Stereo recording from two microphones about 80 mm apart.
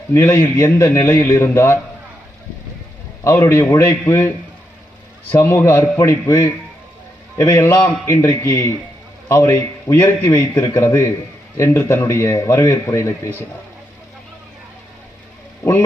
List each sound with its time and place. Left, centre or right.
0.1 s a man's voice: left
1.4 s a man's voice: left
3.2 s a man's voice: left
3.8 s a man's voice: left
5.3 s a man's voice: left